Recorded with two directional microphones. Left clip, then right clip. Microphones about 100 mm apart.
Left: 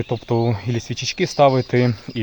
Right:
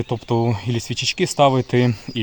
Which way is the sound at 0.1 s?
15° right (ahead or behind).